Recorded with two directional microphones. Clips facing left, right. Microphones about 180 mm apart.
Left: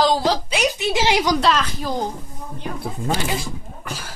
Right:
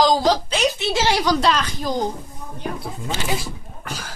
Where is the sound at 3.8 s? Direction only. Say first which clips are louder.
Right 1 dB; 5° left (ahead or behind).